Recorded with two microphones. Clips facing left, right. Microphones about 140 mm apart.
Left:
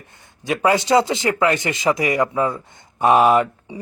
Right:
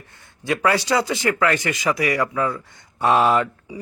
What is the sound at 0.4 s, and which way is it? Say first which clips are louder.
A man's voice: left 2 dB; 15° left (ahead or behind).